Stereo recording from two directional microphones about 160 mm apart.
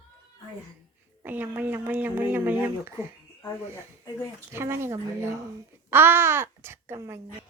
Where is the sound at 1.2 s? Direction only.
10° right (ahead or behind).